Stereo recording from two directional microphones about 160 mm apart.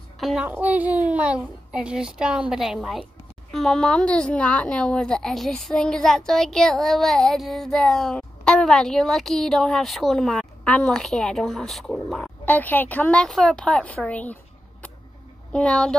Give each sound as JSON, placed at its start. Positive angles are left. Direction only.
{"t": 0.2, "sound": "music", "side_deg": 0}
{"t": 0.5, "sound": "a woman's voice", "side_deg": -10}
{"t": 12.4, "sound": "a woman's voice", "side_deg": 10}